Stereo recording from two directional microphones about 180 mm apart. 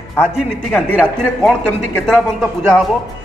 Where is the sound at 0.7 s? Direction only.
5° left (ahead or behind).